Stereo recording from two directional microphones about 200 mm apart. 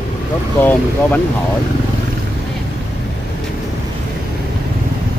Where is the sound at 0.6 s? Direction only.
10° left (ahead or behind).